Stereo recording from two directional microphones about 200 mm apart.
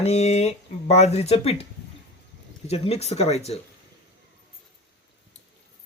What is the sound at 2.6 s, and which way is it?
Speech, 30° left (ahead or behind).